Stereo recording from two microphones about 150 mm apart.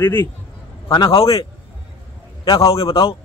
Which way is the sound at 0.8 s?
30° left (ahead or behind).